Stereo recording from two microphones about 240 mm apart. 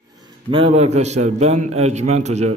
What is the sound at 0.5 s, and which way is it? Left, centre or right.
Speech, right.